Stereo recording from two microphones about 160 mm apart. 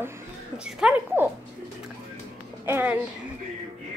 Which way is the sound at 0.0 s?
15° right (ahead or behind).